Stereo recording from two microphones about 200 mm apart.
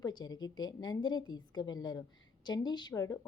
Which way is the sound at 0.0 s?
20° left (ahead or behind).